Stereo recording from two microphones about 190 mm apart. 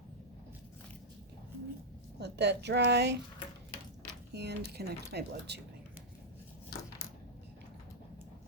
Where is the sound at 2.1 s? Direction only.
60° right (ahead or behind).